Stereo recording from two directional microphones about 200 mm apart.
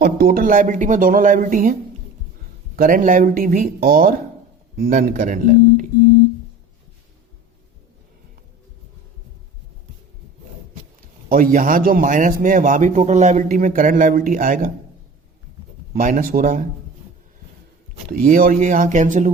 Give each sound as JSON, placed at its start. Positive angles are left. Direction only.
{"t": 0.0, "sound": "speech", "side_deg": -50}
{"t": 2.7, "sound": "a man's voice", "side_deg": -45}
{"t": 11.3, "sound": "a man's voice", "side_deg": -45}
{"t": 15.9, "sound": "speech", "side_deg": -45}
{"t": 18.1, "sound": "a man's voice", "side_deg": -45}